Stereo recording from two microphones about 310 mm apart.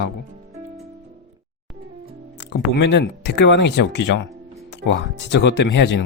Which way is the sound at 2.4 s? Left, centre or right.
Left.